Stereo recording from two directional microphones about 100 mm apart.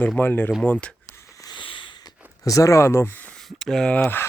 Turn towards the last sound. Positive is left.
turn(degrees=5)  # may be behind; listen again after turning